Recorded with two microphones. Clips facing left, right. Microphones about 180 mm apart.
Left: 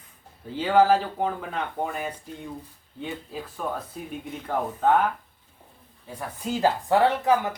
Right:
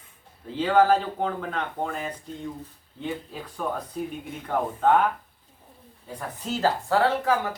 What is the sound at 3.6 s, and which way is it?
Speech, centre (ahead or behind).